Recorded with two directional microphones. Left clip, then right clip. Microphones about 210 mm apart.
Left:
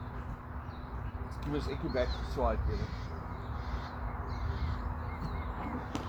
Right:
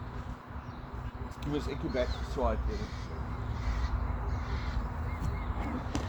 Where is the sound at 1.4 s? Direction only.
30° right (ahead or behind).